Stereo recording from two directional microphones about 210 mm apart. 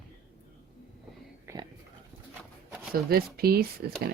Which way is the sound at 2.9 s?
45° right (ahead or behind).